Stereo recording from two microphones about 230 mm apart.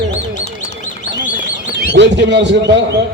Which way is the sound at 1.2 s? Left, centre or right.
Left.